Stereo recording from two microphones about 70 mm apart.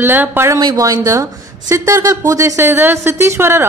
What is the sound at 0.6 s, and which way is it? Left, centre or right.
Speech, right.